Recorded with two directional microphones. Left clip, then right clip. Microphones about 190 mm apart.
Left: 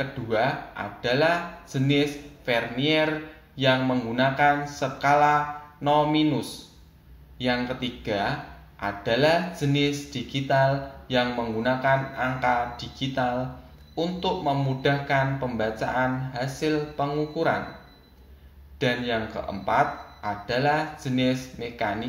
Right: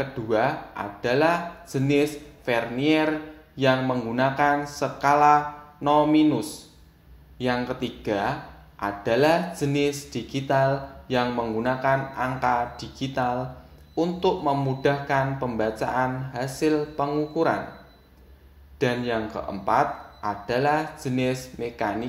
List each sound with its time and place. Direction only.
0.3 s speech: 45° right (ahead or behind)
18.8 s speech: 50° right (ahead or behind)